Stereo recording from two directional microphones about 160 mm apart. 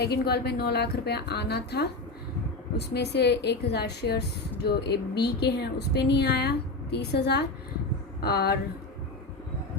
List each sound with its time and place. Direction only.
0.0 s a woman's voice: 90° left
8.2 s speech: 80° left